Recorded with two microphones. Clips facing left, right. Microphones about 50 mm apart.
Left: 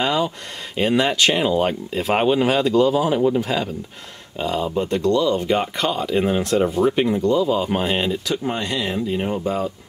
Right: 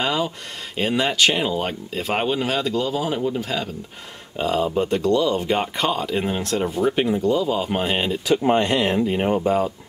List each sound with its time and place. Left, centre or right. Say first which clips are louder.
0.0 s a sound: left 2 dB; centre
0.7 s speech: left 2 dB; centre
3.2 s speech: left 6 dB; centre
3.4 s speech: left 3 dB; centre
4.4 s speech: right 1 dB; centre
8.5 s speech: right 7 dB; right
9.3 s speech: right 3 dB; centre